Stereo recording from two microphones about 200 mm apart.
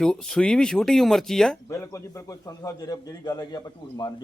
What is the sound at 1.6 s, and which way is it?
A man's voice, 15° left (ahead or behind).